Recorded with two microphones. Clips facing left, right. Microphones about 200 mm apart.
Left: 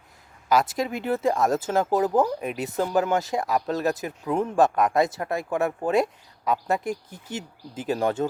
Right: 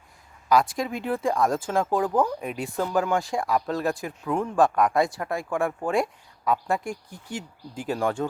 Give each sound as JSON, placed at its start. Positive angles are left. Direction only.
{"t": 0.4, "sound": "speech", "side_deg": 25}
{"t": 2.2, "sound": "speech", "side_deg": 5}
{"t": 2.6, "sound": "speech", "side_deg": 20}